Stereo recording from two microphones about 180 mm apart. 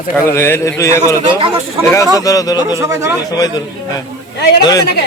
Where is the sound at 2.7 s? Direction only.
15° right (ahead or behind).